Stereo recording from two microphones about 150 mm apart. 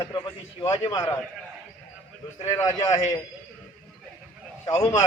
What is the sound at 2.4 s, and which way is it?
Speech, 20° left (ahead or behind).